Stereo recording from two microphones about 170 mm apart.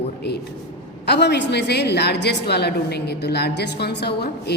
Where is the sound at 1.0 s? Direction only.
75° left (ahead or behind).